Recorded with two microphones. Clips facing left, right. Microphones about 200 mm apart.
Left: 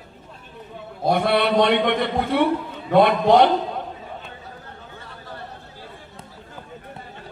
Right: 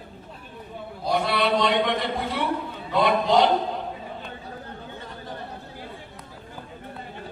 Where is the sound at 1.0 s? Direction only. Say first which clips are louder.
Left 5 dB; 55° left (ahead or behind).